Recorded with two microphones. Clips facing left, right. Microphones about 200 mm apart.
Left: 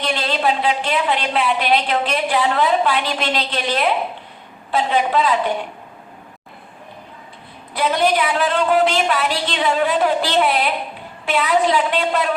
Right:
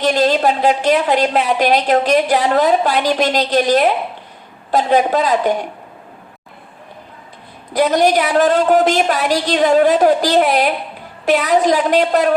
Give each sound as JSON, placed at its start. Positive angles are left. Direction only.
{"t": 0.0, "sound": "a woman's voice", "side_deg": -45}
{"t": 7.7, "sound": "a woman's voice", "side_deg": -40}